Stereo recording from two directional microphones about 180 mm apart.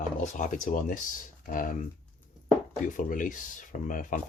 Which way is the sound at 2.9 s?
50° left (ahead or behind).